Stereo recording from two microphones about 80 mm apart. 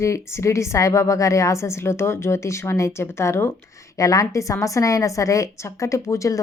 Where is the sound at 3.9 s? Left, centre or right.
Left.